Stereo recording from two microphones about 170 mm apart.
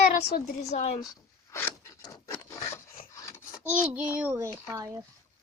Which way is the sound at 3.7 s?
10° right (ahead or behind).